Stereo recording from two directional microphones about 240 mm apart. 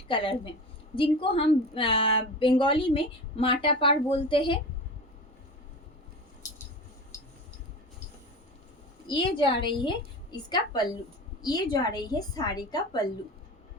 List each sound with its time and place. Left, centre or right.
0.1 s a woman's voice: left
9.0 s a woman's voice: left